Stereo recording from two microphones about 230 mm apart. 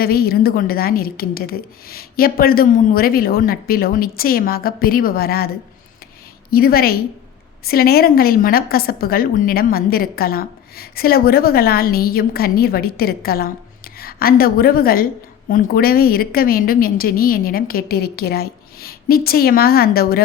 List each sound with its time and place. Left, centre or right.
0.0 s a woman's voice: left
6.5 s a woman's voice: left